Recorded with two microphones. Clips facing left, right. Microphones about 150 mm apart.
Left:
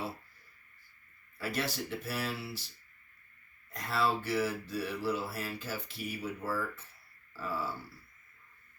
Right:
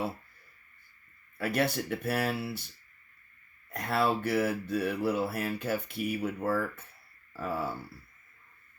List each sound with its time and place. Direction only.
1.4 s mantra: 60° right (ahead or behind)
3.7 s mantra: 60° right (ahead or behind)